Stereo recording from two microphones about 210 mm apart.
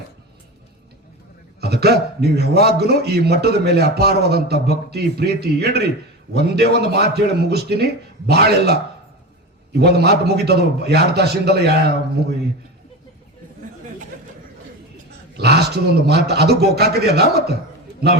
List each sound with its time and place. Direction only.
1.6 s a man's voice: 50° right (ahead or behind)
9.8 s a man's voice: 50° right (ahead or behind)
15.4 s a man's voice: 50° right (ahead or behind)